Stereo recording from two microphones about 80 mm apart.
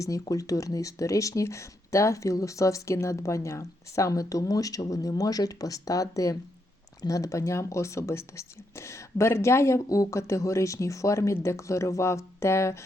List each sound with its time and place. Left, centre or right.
0.0 s speech: left